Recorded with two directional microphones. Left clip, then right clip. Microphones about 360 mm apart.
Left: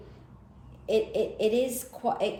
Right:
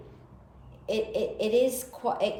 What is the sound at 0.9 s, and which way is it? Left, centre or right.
A woman's voice, centre.